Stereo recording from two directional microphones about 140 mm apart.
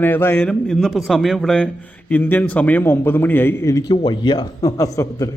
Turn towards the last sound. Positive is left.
turn(degrees=25)  # may be behind; listen again after turning